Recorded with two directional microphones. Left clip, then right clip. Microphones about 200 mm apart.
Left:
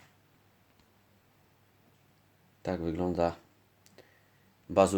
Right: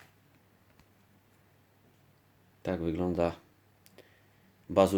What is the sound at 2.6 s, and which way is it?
Speech, centre (ahead or behind).